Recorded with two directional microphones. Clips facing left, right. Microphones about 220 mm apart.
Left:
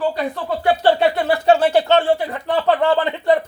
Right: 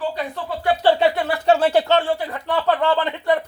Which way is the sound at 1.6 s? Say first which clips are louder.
Left 2 dB; 15° left (ahead or behind).